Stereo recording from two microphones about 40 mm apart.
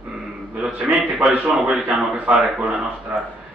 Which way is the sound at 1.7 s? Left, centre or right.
Right.